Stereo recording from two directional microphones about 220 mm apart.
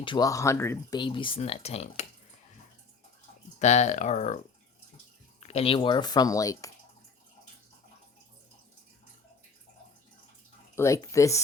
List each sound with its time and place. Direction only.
0.0 s speech: 20° left (ahead or behind)
3.6 s speech: 30° left (ahead or behind)
5.4 s speech: 30° left (ahead or behind)
10.8 s speech: 15° left (ahead or behind)